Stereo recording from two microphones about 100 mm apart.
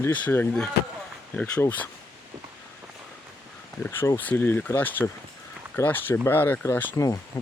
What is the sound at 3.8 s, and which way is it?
Speech, 30° left (ahead or behind).